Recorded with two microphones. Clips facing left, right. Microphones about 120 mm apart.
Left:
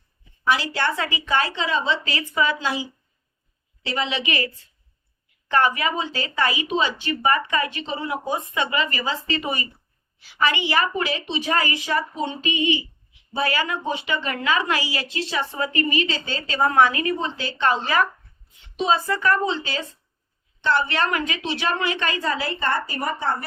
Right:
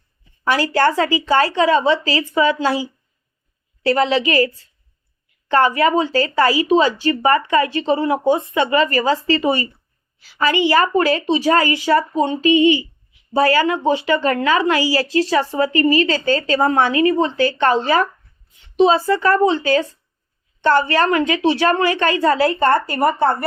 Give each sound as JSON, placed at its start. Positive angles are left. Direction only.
{"t": 0.5, "sound": "a woman's voice", "side_deg": -45}
{"t": 2.0, "sound": "a woman's voice", "side_deg": -30}
{"t": 3.8, "sound": "a woman's voice", "side_deg": -45}
{"t": 5.5, "sound": "a woman's voice", "side_deg": -30}
{"t": 17.2, "sound": "a woman's voice", "side_deg": -55}
{"t": 17.8, "sound": "a woman's voice", "side_deg": -35}
{"t": 19.5, "sound": "a woman's voice", "side_deg": -45}
{"t": 22.4, "sound": "a woman's voice", "side_deg": -50}